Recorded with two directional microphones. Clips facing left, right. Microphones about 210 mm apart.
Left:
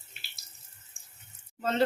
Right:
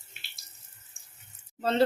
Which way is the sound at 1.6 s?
35° right (ahead or behind).